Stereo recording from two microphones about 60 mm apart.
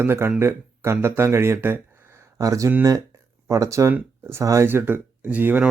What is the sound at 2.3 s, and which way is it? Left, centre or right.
Speech, right.